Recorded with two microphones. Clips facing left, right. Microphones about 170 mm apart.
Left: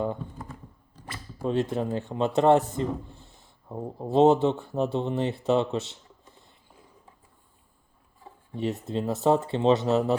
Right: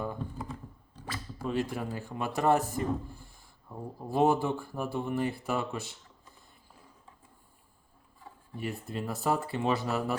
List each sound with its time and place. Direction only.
1.5 s a man's voice: 25° left (ahead or behind)
8.5 s a man's voice: 25° left (ahead or behind)